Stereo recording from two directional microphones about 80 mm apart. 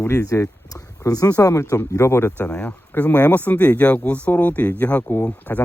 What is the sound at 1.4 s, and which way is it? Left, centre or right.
Speech, left.